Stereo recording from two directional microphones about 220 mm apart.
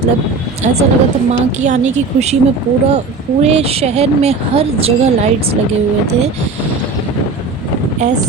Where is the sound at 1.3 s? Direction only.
30° right (ahead or behind).